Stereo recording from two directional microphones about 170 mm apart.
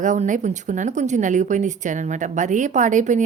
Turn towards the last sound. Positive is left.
turn(degrees=-45)  # may be behind; listen again after turning